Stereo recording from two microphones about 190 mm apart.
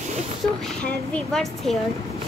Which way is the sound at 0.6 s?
5° left (ahead or behind).